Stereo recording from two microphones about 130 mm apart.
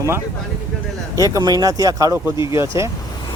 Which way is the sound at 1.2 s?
30° right (ahead or behind).